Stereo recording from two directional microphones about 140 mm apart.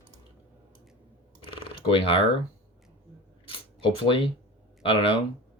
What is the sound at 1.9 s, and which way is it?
Speech, 40° left (ahead or behind).